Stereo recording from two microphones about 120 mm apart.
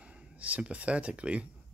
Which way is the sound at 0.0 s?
10° right (ahead or behind).